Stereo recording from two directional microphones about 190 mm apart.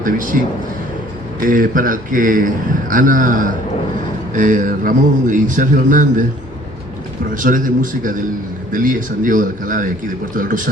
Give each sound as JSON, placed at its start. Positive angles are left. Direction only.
{"t": 0.0, "sound": "a man's voice", "side_deg": -45}
{"t": 1.4, "sound": "a man's voice", "side_deg": -45}
{"t": 7.3, "sound": "a man's voice", "side_deg": -45}